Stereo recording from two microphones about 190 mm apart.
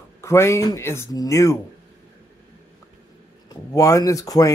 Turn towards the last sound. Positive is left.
turn(degrees=20)  # may be behind; listen again after turning